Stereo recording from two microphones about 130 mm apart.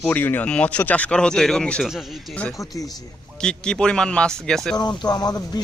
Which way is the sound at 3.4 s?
5° left (ahead or behind).